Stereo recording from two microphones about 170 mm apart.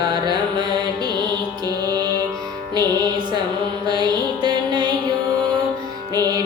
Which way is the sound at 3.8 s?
25° right (ahead or behind).